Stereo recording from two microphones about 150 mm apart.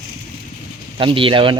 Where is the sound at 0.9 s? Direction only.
35° right (ahead or behind).